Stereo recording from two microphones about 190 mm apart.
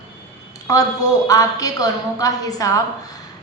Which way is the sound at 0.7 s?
15° left (ahead or behind).